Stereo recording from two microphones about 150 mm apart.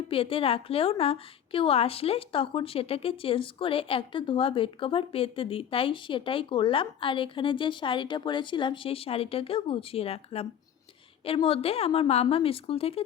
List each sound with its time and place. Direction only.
0.1 s a woman's voice: 40° left (ahead or behind)
11.4 s a woman's voice: 40° left (ahead or behind)